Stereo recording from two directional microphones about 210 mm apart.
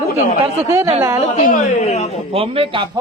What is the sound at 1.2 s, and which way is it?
Speech, 35° left (ahead or behind).